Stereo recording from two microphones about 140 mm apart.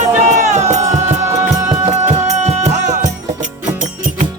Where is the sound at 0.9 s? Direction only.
25° right (ahead or behind).